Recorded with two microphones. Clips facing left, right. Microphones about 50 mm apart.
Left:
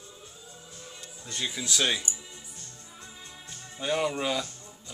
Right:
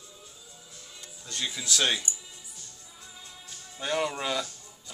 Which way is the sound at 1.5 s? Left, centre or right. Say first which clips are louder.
Right 1 dB; centre.